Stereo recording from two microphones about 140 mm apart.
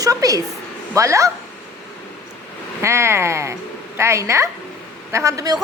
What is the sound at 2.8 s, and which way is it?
A woman's voice, 20° right (ahead or behind).